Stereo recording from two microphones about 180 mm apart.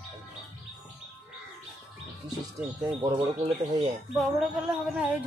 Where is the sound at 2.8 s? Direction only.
30° right (ahead or behind).